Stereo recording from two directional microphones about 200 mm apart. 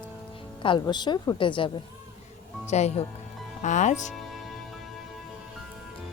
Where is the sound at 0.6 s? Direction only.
25° left (ahead or behind).